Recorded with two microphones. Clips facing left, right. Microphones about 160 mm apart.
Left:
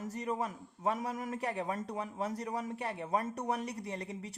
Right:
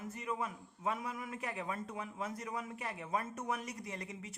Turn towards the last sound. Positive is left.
turn(degrees=35)  # may be behind; listen again after turning